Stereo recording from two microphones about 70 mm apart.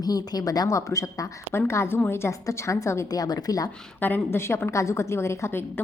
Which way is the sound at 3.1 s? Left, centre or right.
Left.